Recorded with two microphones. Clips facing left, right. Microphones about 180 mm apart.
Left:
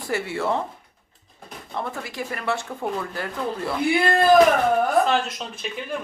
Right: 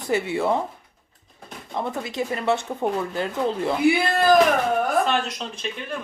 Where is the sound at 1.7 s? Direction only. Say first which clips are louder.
Right 3 dB; 20° right (ahead or behind).